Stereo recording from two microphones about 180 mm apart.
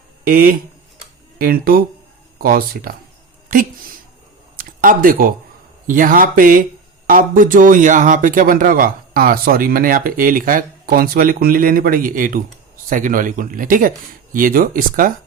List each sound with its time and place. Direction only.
0.3 s speech: 50° right (ahead or behind)
4.5 s a sound: 50° right (ahead or behind)
5.9 s speech: 50° right (ahead or behind)